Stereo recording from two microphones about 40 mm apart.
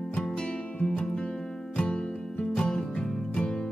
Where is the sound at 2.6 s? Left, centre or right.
Left.